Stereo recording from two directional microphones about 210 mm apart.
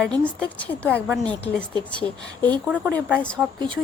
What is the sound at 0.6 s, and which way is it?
Speech, 5° left (ahead or behind).